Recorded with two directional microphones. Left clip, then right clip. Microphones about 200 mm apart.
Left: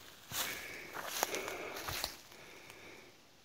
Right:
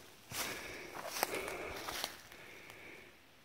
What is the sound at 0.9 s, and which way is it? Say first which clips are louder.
Walk: left 1 dB; 10° left (ahead or behind).